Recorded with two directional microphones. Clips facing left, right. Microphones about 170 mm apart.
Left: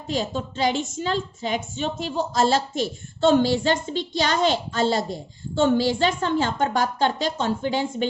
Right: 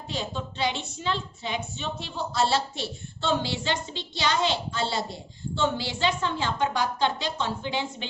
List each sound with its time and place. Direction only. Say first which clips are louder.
0.1 s a woman's voice: left 7 dB; 40° left (ahead or behind)